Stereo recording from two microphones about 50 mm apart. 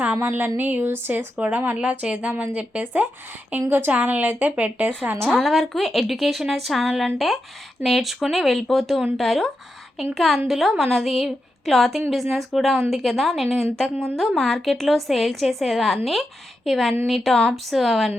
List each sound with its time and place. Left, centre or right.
0.2 s a woman's voice: right
1.8 s a woman's voice: right
5.4 s a woman's voice: centre